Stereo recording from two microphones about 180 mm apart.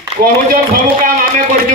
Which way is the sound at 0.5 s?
50° right (ahead or behind).